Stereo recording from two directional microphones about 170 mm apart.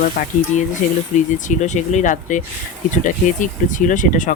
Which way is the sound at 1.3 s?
45° left (ahead or behind).